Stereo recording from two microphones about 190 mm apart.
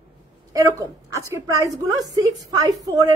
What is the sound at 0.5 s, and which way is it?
A woman's voice, 15° right (ahead or behind).